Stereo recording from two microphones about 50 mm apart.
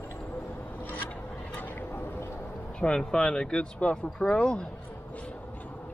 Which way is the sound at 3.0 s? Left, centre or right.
Centre.